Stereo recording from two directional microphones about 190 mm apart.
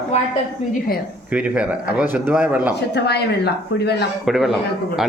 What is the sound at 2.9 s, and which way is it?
Speech, 60° left (ahead or behind).